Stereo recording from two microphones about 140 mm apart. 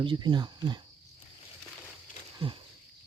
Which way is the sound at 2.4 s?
40° right (ahead or behind).